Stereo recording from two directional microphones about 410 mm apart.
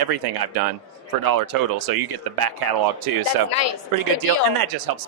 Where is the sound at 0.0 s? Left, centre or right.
Right.